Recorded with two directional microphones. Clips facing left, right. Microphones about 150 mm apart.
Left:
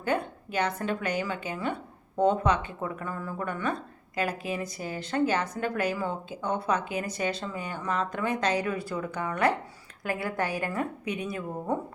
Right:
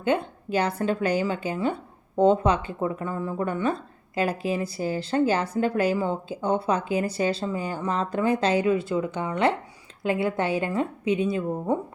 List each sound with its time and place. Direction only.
0.0 s a woman's voice: 25° right (ahead or behind)